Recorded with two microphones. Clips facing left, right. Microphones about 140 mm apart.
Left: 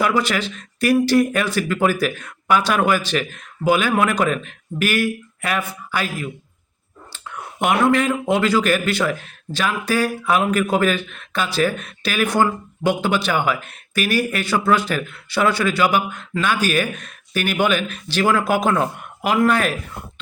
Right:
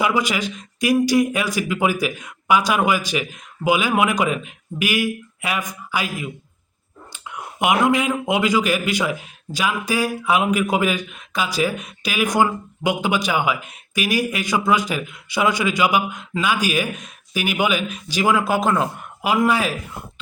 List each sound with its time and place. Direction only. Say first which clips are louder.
0.0 s a man's voice: left 1 dB; 10° right (ahead or behind)
18.4 s speech: left 1 dB; centre (ahead or behind)